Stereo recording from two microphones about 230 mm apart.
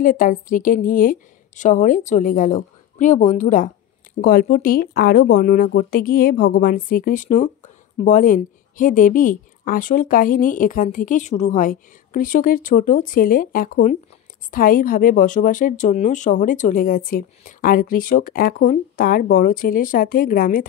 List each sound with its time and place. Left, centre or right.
0.0 s speech: left